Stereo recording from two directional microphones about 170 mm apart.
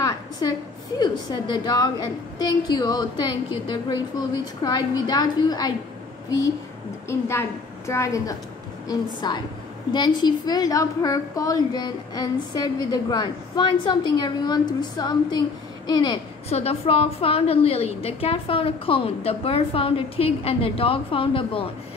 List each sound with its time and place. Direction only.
0.0 s a woman's voice: 20° left (ahead or behind)
7.1 s a woman's voice: 15° left (ahead or behind)
16.4 s a woman's voice: 35° left (ahead or behind)